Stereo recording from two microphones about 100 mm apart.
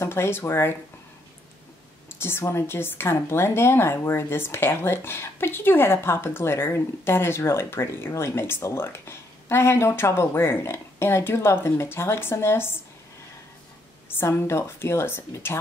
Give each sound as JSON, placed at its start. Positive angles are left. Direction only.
{"t": 0.0, "sound": "a woman's voice", "side_deg": 25}
{"t": 2.0, "sound": "a woman's voice", "side_deg": 25}
{"t": 14.1, "sound": "a woman's voice", "side_deg": 25}